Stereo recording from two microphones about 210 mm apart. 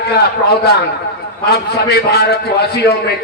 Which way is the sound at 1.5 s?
50° left (ahead or behind).